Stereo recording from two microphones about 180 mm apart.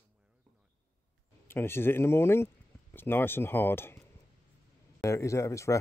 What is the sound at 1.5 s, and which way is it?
Speech, 15° left (ahead or behind).